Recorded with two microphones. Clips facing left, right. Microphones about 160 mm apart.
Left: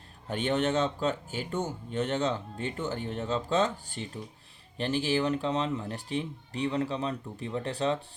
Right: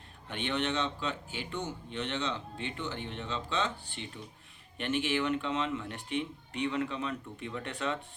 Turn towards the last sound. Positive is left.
turn(degrees=35)  # may be behind; listen again after turning